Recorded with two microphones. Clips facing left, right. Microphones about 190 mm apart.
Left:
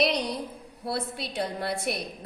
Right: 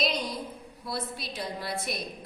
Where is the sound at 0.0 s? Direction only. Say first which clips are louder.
Left 4 dB; 65° left (ahead or behind).